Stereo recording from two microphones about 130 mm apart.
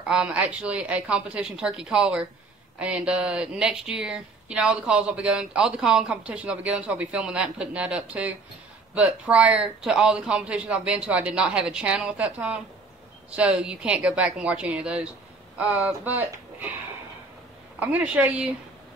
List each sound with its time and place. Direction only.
0.0 s speech: 5° right (ahead or behind)
17.7 s speech: 10° right (ahead or behind)